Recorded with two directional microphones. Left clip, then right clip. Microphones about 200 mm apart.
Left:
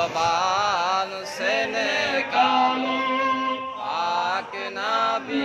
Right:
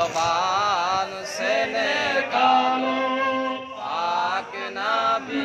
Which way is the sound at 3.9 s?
30° left (ahead or behind).